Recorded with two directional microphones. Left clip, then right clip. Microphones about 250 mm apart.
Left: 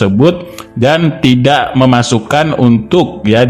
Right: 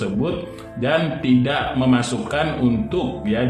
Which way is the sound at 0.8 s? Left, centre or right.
Left.